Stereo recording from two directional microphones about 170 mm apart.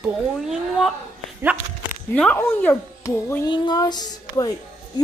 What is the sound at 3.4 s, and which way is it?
Speech, 25° left (ahead or behind).